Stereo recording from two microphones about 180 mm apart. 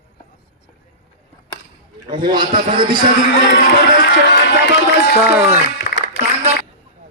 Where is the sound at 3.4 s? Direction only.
65° left (ahead or behind).